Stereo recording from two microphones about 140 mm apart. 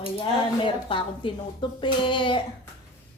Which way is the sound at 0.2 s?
40° left (ahead or behind).